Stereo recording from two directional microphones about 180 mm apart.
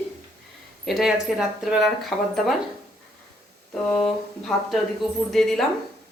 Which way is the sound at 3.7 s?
5° left (ahead or behind).